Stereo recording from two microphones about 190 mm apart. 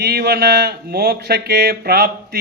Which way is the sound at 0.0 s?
55° right (ahead or behind).